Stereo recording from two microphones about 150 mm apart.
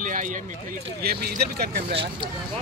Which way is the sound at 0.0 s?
60° right (ahead or behind).